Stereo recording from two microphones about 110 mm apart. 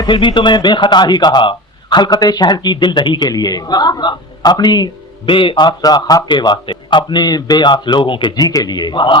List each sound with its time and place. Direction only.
0.0 s speech: 45° left (ahead or behind)
8.4 s speech: 35° left (ahead or behind)